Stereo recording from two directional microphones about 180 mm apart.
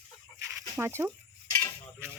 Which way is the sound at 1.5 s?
15° left (ahead or behind).